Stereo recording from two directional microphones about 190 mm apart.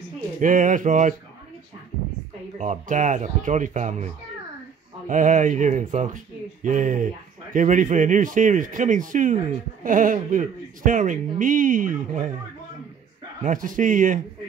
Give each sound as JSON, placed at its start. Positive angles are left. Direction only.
{"t": 0.4, "sound": "speech", "side_deg": -40}
{"t": 2.6, "sound": "speech", "side_deg": -40}
{"t": 13.4, "sound": "speech", "side_deg": -45}